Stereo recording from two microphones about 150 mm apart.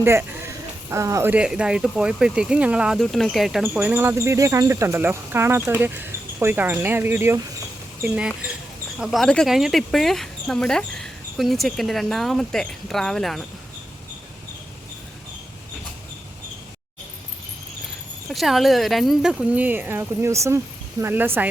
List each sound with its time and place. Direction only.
0.0 s speech: 15° right (ahead or behind); by 3.7 s centre (ahead or behind)
3.8 s speech: 15° right (ahead or behind)
18.3 s speech: centre (ahead or behind)